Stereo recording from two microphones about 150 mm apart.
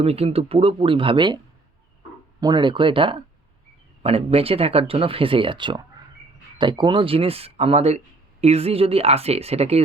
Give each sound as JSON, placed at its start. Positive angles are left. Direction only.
{"t": 0.0, "sound": "speech", "side_deg": -40}
{"t": 2.4, "sound": "speech", "side_deg": -30}